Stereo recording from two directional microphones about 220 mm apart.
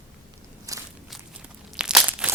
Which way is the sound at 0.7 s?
15° right (ahead or behind).